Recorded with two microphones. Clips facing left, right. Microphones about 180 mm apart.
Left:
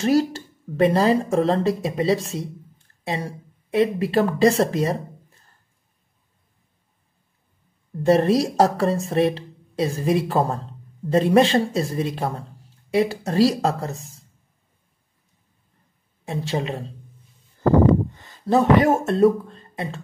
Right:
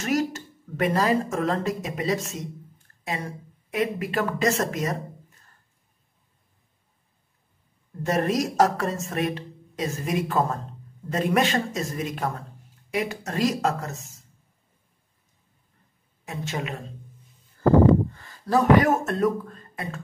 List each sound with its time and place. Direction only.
0.0 s a woman's voice: 30° left (ahead or behind)
8.0 s a woman's voice: 30° left (ahead or behind)
16.3 s a woman's voice: 30° left (ahead or behind)
18.1 s speech: 20° left (ahead or behind)